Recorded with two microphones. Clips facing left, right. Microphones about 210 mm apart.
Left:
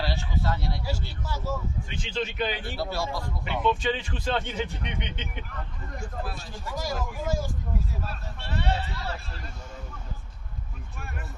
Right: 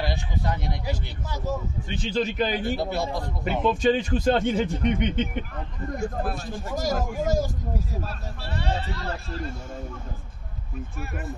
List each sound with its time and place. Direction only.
0.0 s speech: 15° right (ahead or behind)
1.9 s a man's voice: 40° right (ahead or behind)
2.8 s a man's voice: 20° right (ahead or behind)
3.6 s speech: 40° right (ahead or behind)